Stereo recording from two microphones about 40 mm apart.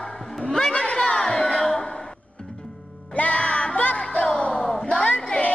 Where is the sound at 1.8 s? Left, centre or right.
Left.